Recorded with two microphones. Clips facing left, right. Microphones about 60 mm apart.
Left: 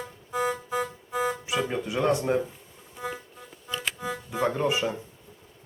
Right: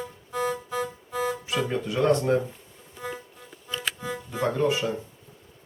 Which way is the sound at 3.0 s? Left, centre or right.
Centre.